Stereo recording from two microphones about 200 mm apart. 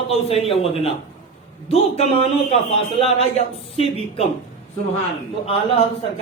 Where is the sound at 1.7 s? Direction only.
30° left (ahead or behind).